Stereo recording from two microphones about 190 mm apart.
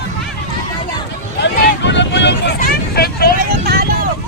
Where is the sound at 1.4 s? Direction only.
70° left (ahead or behind).